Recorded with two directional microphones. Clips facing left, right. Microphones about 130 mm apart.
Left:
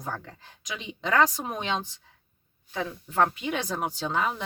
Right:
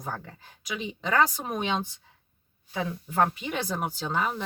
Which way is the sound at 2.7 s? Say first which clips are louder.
Even; 15° right (ahead or behind).